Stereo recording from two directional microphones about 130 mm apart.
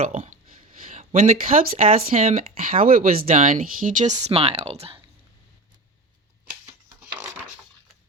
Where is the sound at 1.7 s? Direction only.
85° right.